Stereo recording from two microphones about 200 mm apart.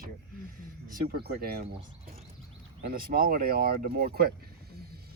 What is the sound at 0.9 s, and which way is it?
Speech, 50° right (ahead or behind).